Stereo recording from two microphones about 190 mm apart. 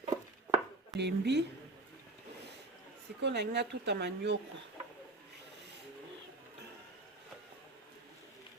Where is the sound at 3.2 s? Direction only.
65° right (ahead or behind).